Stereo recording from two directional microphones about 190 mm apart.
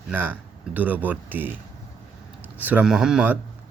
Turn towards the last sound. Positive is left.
turn(degrees=-5)  # may be behind; listen again after turning